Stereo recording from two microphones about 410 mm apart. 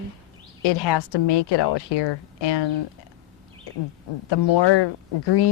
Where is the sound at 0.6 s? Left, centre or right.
Left.